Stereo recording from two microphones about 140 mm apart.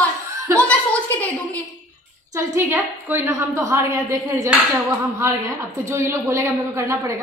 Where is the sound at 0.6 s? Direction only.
10° left (ahead or behind).